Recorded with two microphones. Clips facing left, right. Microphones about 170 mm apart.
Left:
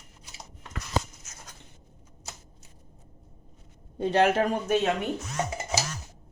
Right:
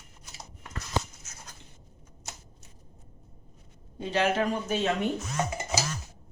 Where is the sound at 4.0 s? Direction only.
50° left (ahead or behind).